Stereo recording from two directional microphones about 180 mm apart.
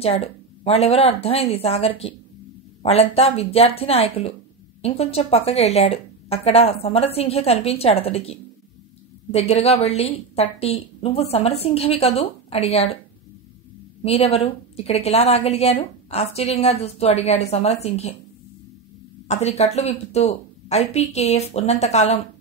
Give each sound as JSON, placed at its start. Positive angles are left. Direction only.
{"t": 0.0, "sound": "a woman's voice", "side_deg": 35}
{"t": 14.0, "sound": "a woman's voice", "side_deg": 35}
{"t": 19.2, "sound": "a woman's voice", "side_deg": 35}